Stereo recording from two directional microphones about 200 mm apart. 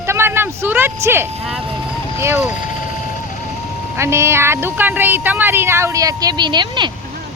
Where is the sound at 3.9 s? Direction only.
15° right (ahead or behind).